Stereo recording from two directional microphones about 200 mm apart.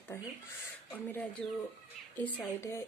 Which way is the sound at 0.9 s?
10° left (ahead or behind).